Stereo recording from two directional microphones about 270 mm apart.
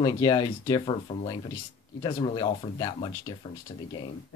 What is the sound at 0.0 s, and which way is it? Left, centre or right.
Speech, centre.